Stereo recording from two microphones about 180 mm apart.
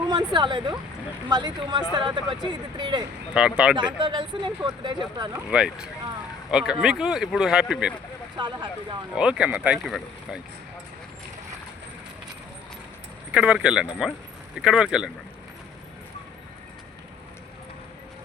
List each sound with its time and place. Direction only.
0.1 s speech: 25° right (ahead or behind)
3.3 s speech: 5° right (ahead or behind)
3.8 s speech: 25° right (ahead or behind)
5.5 s speech: 5° right (ahead or behind)
8.4 s speech: 25° right (ahead or behind)
9.1 s speech: 5° right (ahead or behind)
13.3 s speech: 5° right (ahead or behind)